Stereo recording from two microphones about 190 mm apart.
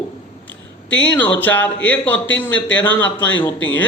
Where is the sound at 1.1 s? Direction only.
10° left (ahead or behind).